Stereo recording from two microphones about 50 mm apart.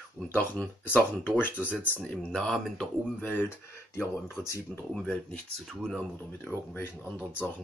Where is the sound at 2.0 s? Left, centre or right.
Left.